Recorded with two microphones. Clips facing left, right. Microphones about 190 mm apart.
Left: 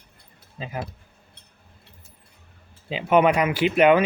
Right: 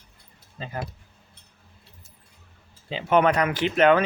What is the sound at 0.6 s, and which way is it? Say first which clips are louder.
Speech: left 1 dB; 10° left (ahead or behind).